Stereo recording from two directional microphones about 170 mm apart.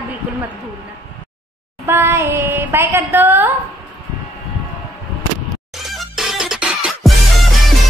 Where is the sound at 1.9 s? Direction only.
15° right (ahead or behind).